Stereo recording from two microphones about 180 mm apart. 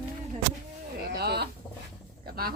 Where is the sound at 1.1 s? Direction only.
65° right (ahead or behind).